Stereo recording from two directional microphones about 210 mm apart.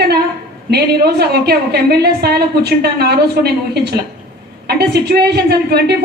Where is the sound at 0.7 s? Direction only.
50° right (ahead or behind).